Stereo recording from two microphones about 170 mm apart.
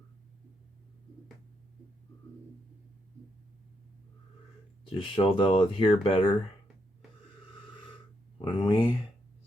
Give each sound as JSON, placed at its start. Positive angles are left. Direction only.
{"t": 4.9, "sound": "speech", "side_deg": 30}
{"t": 8.6, "sound": "speech", "side_deg": 30}